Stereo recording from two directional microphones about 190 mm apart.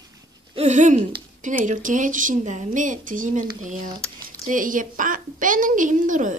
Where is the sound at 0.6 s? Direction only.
40° right (ahead or behind).